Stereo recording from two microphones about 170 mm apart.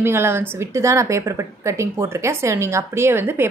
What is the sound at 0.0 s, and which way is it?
A woman's voice, 15° right (ahead or behind).